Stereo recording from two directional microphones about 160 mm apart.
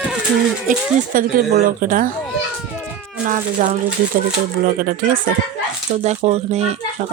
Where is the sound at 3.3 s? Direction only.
55° right (ahead or behind).